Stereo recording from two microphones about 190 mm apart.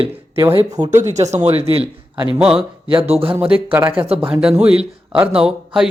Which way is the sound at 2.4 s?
5° right (ahead or behind).